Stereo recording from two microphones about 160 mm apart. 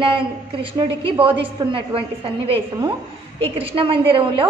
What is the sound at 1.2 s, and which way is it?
A woman's voice, 35° right (ahead or behind).